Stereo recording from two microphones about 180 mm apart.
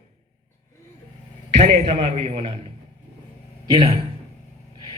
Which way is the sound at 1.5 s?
40° right (ahead or behind).